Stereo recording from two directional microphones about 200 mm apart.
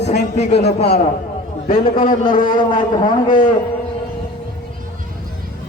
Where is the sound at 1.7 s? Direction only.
45° left (ahead or behind).